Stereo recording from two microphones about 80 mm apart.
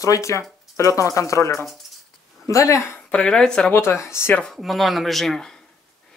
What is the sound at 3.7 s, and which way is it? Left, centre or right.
Speech, left.